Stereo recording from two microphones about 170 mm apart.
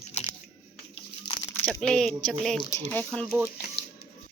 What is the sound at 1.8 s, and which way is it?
Speech, 5° left (ahead or behind).